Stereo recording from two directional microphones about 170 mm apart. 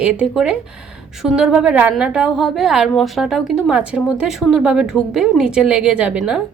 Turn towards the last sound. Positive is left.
turn(degrees=-5)  # may be behind; listen again after turning